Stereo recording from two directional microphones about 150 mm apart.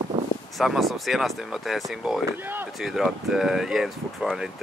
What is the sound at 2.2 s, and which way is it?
Speech, 15° right (ahead or behind).